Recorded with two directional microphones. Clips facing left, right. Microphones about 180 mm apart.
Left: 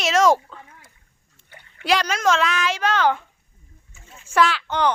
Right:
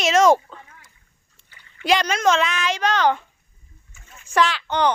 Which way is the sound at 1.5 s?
55° left (ahead or behind).